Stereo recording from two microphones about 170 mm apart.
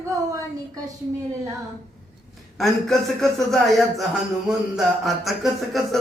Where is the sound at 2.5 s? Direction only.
Centre (ahead or behind).